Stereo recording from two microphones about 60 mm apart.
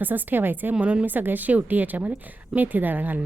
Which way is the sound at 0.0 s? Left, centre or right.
Right.